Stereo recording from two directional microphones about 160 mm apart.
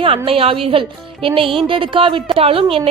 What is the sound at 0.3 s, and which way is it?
A woman's voice, 35° right (ahead or behind).